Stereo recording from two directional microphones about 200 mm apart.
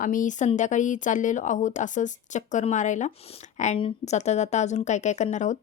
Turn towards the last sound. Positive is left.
turn(degrees=35)  # may be behind; listen again after turning